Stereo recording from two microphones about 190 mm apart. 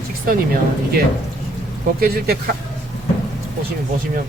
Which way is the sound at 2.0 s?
55° right (ahead or behind).